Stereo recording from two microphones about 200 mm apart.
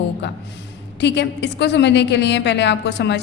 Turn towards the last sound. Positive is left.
turn(degrees=60)  # may be behind; listen again after turning